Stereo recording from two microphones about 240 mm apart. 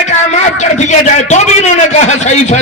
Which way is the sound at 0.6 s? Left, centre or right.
Left.